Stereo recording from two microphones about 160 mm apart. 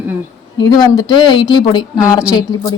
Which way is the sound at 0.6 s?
25° left (ahead or behind).